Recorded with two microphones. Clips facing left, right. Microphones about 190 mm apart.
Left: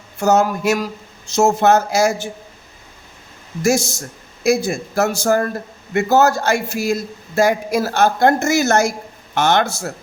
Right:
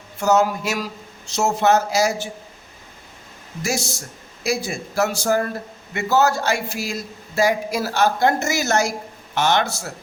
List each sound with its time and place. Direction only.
0.2 s a man's voice: 50° left (ahead or behind)
3.6 s a man's voice: 45° left (ahead or behind)